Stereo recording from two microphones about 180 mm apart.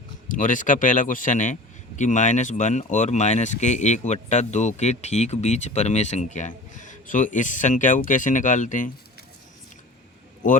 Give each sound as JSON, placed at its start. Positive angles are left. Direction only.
{"t": 0.3, "sound": "speech", "side_deg": 45}